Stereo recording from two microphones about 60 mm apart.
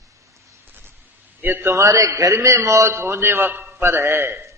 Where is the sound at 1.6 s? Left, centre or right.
Right.